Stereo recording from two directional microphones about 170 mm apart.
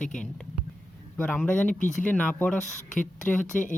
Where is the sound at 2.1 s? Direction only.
10° left (ahead or behind).